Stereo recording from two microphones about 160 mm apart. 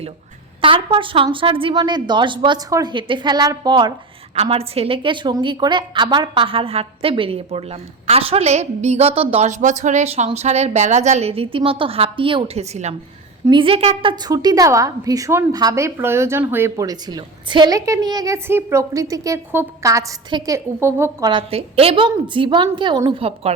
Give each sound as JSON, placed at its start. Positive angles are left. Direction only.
{"t": 0.6, "sound": "a woman's voice", "side_deg": -35}
{"t": 4.4, "sound": "a woman's voice", "side_deg": -40}
{"t": 21.2, "sound": "a woman's voice", "side_deg": -35}